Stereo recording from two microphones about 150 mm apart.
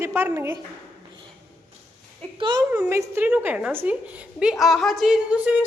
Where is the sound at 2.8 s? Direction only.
20° right (ahead or behind).